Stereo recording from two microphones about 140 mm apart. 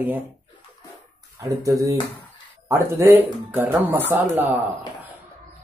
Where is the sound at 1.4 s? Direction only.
25° right (ahead or behind).